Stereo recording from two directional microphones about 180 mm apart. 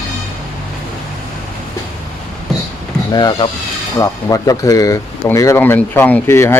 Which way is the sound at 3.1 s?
25° left (ahead or behind).